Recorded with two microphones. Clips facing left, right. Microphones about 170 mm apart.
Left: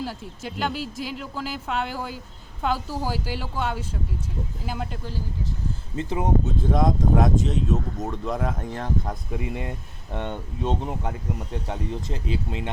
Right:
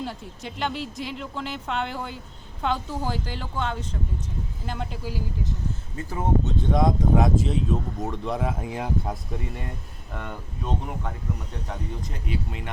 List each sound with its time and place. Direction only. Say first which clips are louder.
0.0 s speech: left 1 dB; centre (ahead or behind)
6.0 s speech: left 2 dB; 20° left (ahead or behind)
6.6 s speech: right 1 dB; centre (ahead or behind)
10.1 s speech: left 5 dB; 25° left (ahead or behind)